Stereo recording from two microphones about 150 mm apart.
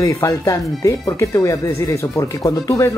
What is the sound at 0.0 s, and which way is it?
Speech, 20° left (ahead or behind).